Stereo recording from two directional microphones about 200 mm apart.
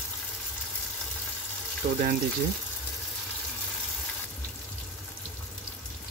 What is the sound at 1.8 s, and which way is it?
Speech, 45° right (ahead or behind).